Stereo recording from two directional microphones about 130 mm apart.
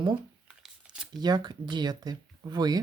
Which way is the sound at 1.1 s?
35° right (ahead or behind).